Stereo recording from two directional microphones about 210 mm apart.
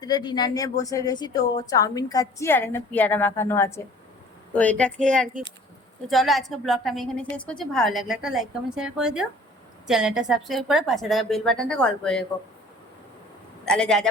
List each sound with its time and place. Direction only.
0.0 s a woman's voice: 20° left (ahead or behind)
6.1 s a woman's voice: centre (ahead or behind)
13.7 s a woman's voice: 5° left (ahead or behind)